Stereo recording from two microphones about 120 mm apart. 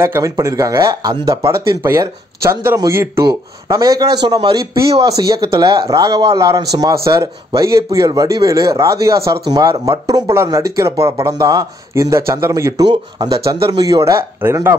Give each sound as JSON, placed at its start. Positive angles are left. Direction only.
{"t": 0.0, "sound": "a man's voice", "side_deg": -20}
{"t": 12.8, "sound": "a man's voice", "side_deg": -40}